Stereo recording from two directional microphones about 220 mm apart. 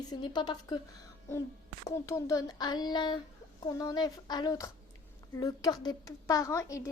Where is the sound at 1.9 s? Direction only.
15° left (ahead or behind).